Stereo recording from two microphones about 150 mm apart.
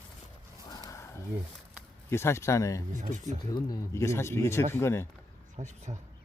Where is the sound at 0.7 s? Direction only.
25° left (ahead or behind).